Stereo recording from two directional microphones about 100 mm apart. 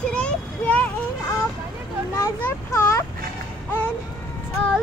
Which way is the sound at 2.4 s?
25° left (ahead or behind).